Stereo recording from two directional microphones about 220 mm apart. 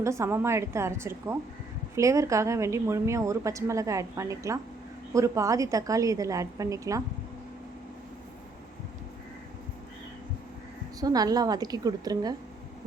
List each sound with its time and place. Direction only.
0.0 s a woman's voice: 15° right (ahead or behind)
11.0 s a woman's voice: 15° right (ahead or behind)